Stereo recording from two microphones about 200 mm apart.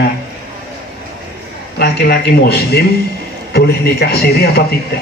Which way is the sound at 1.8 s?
55° left (ahead or behind).